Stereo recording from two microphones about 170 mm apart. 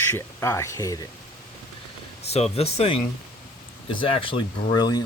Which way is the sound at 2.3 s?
40° left (ahead or behind).